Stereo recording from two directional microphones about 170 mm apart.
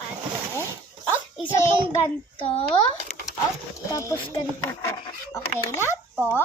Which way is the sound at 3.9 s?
20° left (ahead or behind).